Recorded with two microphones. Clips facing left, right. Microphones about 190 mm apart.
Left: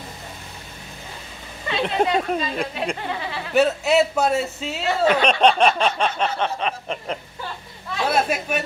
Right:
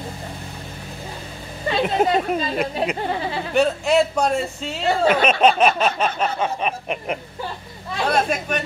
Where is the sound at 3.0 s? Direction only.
35° right (ahead or behind).